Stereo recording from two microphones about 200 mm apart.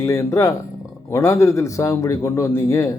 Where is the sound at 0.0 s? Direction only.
15° left (ahead or behind).